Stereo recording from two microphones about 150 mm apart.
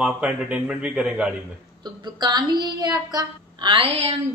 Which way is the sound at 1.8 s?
30° right (ahead or behind).